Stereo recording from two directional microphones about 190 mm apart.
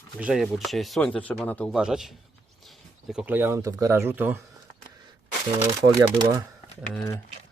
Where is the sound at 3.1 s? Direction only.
5° right (ahead or behind).